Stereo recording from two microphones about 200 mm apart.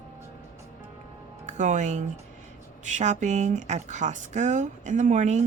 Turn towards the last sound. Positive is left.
turn(degrees=-35)  # may be behind; listen again after turning